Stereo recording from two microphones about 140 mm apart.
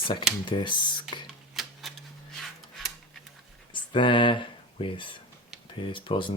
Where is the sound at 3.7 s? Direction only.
35° left (ahead or behind).